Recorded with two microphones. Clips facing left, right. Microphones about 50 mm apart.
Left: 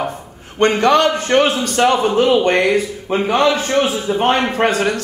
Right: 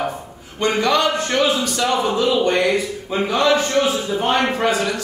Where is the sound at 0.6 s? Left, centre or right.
Left.